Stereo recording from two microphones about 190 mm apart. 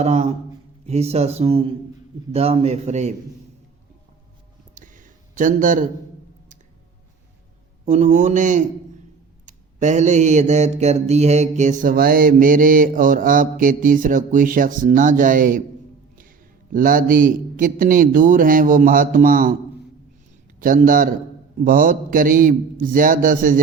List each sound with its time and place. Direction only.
0.0 s a man's voice: 35° right (ahead or behind)
4.7 s a sound: 45° right (ahead or behind)
7.9 s a man's voice: 40° right (ahead or behind)
16.7 s speech: 45° right (ahead or behind)
20.6 s speech: 45° right (ahead or behind)